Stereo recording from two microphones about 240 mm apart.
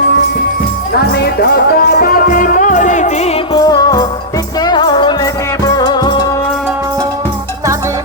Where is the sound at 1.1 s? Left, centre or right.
Left; by 6.2 s centre.